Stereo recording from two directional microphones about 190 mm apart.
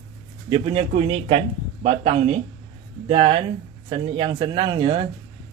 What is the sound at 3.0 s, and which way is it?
Speech, 30° right (ahead or behind).